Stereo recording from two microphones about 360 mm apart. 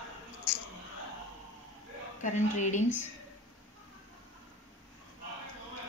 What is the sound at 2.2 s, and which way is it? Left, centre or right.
Speech, centre.